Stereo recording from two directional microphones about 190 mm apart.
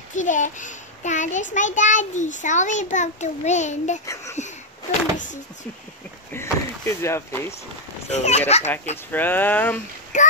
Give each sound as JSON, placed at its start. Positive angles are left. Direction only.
{"t": 0.1, "sound": "a child's voice", "side_deg": 40}
{"t": 4.0, "sound": "speech", "side_deg": 15}
{"t": 5.1, "sound": "a child's voice", "side_deg": 40}
{"t": 6.3, "sound": "speech", "side_deg": 15}
{"t": 8.1, "sound": "a child's voice", "side_deg": 35}
{"t": 8.9, "sound": "speech", "side_deg": 10}
{"t": 10.1, "sound": "a child's voice", "side_deg": 40}